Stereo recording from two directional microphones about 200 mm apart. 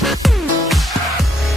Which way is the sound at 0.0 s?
Centre (ahead or behind).